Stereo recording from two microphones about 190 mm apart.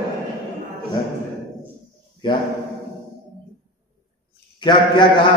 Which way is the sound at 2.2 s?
25° left (ahead or behind).